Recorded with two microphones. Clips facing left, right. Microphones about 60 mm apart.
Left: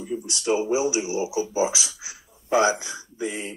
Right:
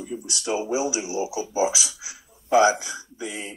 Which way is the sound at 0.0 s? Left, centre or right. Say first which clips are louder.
Left 3 dB; left.